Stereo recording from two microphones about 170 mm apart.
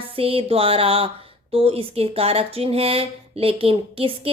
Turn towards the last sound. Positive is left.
turn(degrees=-35)  # may be behind; listen again after turning